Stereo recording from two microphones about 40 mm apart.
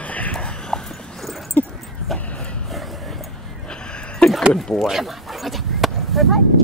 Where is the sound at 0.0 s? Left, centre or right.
Left.